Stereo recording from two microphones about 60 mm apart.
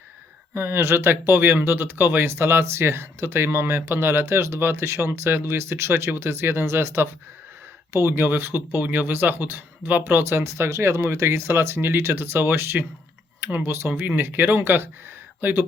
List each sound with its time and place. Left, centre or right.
0.5 s speech: right
8.8 s speech: right
10.5 s speech: right